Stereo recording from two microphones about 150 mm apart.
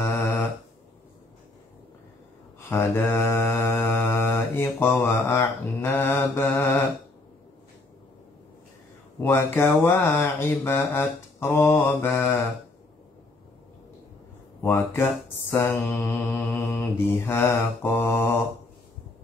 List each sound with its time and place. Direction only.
0.1 s a sound: 15° left (ahead or behind)
2.7 s mantra: 15° left (ahead or behind)
9.2 s mantra: 15° left (ahead or behind)
14.6 s mantra: 15° left (ahead or behind)